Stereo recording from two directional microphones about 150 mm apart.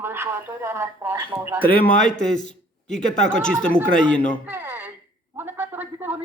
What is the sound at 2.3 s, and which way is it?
A man's voice, 55° left (ahead or behind).